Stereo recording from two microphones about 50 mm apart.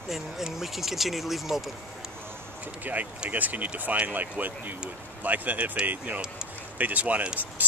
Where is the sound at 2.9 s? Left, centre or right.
Right.